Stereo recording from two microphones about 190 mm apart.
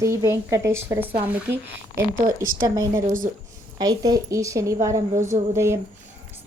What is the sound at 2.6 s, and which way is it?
A woman's voice, 20° right (ahead or behind).